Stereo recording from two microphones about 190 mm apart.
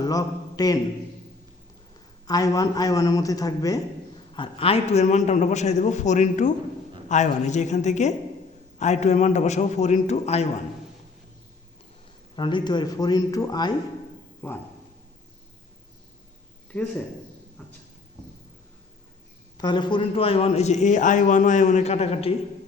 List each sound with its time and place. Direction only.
0.0 s a man's voice: 20° left (ahead or behind)
2.2 s a man's voice: 20° left (ahead or behind)
4.4 s a man's voice: 30° left (ahead or behind)
12.4 s a man's voice: 25° left (ahead or behind)
19.5 s a man's voice: 25° left (ahead or behind)